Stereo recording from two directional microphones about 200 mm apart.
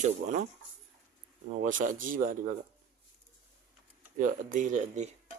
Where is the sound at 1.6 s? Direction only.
40° right (ahead or behind).